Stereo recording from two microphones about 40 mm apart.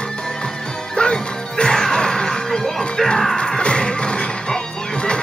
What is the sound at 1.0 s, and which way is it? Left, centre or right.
Music, left.